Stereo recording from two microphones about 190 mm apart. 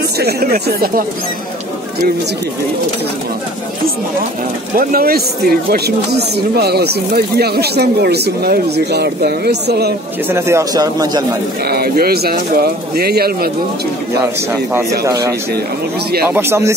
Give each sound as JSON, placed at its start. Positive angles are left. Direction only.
{"t": 0.2, "sound": "speech", "side_deg": -55}
{"t": 4.7, "sound": "speech", "side_deg": -50}
{"t": 10.2, "sound": "speech", "side_deg": -15}
{"t": 11.6, "sound": "speech", "side_deg": -55}
{"t": 14.2, "sound": "speech", "side_deg": -10}